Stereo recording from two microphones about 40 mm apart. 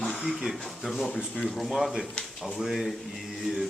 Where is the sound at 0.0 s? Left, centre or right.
Centre.